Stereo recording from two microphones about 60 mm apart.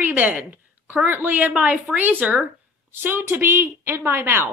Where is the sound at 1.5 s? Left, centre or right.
Centre.